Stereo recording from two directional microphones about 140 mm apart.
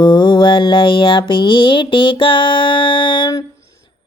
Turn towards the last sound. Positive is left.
turn(degrees=35)  # may be behind; listen again after turning